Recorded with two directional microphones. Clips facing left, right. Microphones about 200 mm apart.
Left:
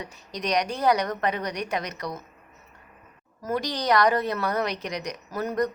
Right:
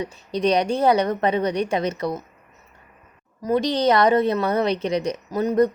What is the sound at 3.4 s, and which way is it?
A woman's voice, 25° right (ahead or behind).